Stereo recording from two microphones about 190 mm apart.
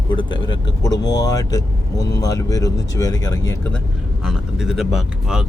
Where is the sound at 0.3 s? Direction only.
25° left (ahead or behind).